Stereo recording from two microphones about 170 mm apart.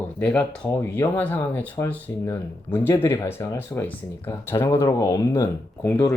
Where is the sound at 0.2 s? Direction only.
5° left (ahead or behind).